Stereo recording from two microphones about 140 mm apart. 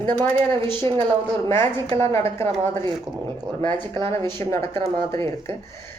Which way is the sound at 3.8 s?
30° right (ahead or behind).